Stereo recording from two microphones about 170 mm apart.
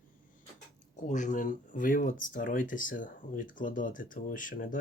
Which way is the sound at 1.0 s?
45° left (ahead or behind).